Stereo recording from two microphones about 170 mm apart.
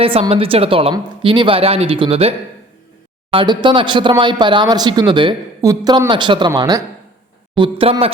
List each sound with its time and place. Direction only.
0.0 s a woman's voice: 35° right (ahead or behind)
7.5 s speech: 30° right (ahead or behind)